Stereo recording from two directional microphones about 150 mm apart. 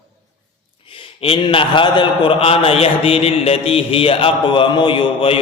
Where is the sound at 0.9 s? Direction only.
35° left (ahead or behind).